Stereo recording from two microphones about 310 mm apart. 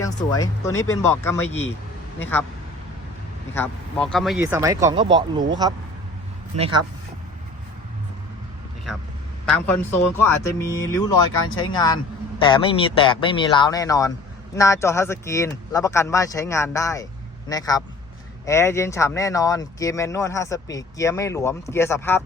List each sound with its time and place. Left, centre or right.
0.0 s speech: centre
3.5 s speech: centre
6.6 s speech: centre
10.0 s speech: centre